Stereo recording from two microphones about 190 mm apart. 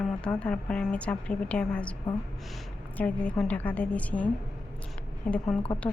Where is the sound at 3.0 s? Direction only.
5° left (ahead or behind).